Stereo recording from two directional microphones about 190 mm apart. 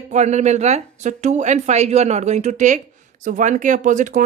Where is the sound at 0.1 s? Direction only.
40° right (ahead or behind).